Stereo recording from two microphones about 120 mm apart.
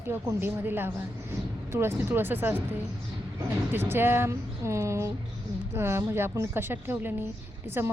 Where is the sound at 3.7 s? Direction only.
20° right (ahead or behind).